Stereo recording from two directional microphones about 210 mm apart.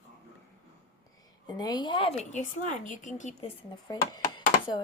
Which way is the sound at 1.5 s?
20° left (ahead or behind).